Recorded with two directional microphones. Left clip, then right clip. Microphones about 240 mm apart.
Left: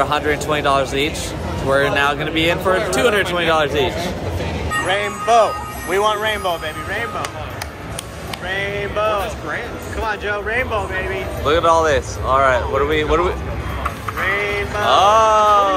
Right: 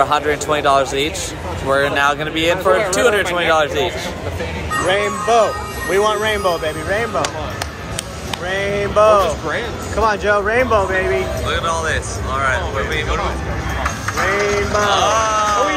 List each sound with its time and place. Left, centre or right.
0.0 s speech: centre
4.8 s speech: centre
8.5 s speech: right
11.4 s speech: centre
14.9 s speech: centre